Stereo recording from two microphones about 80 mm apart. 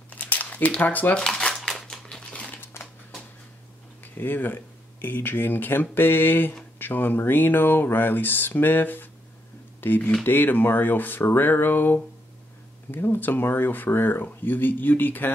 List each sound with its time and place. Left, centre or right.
0.1 s crumpling: centre
2.8 s a sound: left
4.0 s speech: left